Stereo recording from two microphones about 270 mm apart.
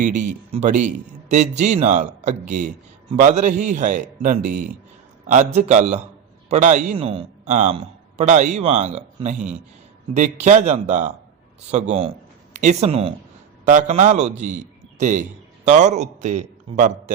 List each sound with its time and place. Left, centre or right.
0.5 s a man's voice: right